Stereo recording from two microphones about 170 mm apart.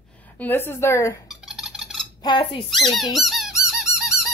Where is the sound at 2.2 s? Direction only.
30° left (ahead or behind).